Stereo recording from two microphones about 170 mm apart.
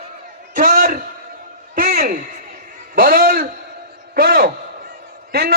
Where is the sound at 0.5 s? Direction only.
55° right (ahead or behind).